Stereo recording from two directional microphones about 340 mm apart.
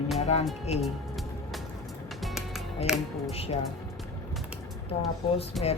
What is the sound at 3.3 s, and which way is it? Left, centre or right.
Speech, centre.